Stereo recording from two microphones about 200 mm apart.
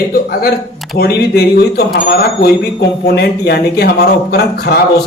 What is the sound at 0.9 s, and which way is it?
A man's voice, 50° left (ahead or behind).